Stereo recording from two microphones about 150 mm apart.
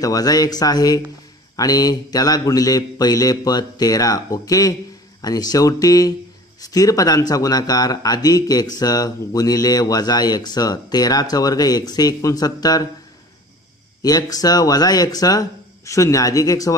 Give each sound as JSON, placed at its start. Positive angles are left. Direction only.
{"t": 0.0, "sound": "speech", "side_deg": 25}
{"t": 14.0, "sound": "speech", "side_deg": 25}